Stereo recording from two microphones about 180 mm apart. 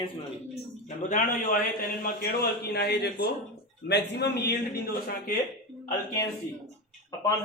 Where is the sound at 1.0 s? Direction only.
45° left (ahead or behind).